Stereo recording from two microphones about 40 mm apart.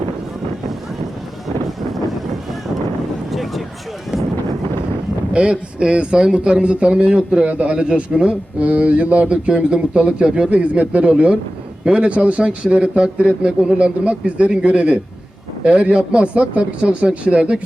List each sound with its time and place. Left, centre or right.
3.3 s a sound: centre
5.3 s a man's voice: right
7.2 s a man's voice: right